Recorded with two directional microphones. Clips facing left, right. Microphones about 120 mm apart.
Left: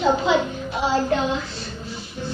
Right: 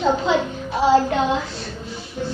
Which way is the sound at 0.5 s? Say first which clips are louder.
Right 6 dB; 25° right (ahead or behind).